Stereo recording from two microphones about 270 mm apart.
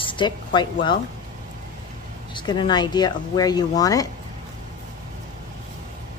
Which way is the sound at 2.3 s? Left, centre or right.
Centre.